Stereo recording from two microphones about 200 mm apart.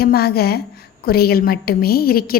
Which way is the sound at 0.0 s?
50° left (ahead or behind).